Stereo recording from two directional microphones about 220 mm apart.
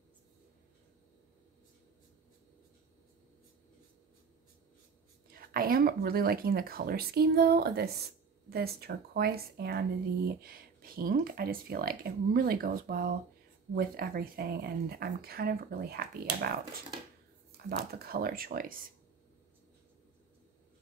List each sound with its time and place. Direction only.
5.3 s speech: 40° right (ahead or behind)
17.9 s speech: 45° right (ahead or behind)